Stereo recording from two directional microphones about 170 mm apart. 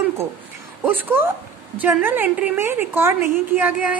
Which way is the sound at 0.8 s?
10° right (ahead or behind).